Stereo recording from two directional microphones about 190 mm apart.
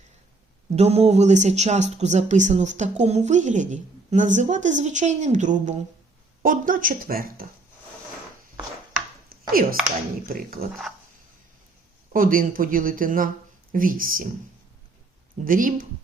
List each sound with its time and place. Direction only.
0.8 s speech: 30° right (ahead or behind); by 7.4 s 50° right (ahead or behind)
9.5 s speech: 50° right (ahead or behind)
12.1 s speech: 45° right (ahead or behind)
15.4 s speech: 45° right (ahead or behind)